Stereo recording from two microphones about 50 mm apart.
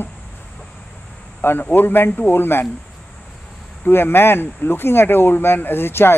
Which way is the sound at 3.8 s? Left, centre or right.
Left.